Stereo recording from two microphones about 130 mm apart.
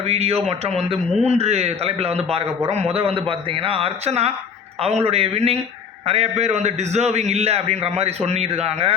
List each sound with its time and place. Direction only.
0.0 s a man's voice: 50° right (ahead or behind)